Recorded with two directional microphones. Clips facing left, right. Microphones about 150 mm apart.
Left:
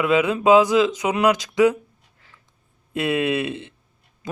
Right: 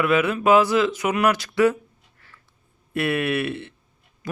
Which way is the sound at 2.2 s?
15° left (ahead or behind).